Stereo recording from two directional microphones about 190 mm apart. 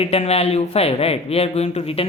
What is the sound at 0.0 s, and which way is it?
Speech, 35° left (ahead or behind).